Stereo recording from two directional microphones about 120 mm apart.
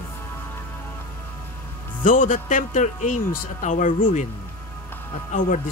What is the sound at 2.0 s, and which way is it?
Speech, 90° left.